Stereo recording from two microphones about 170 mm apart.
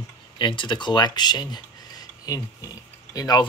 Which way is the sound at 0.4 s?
30° left (ahead or behind).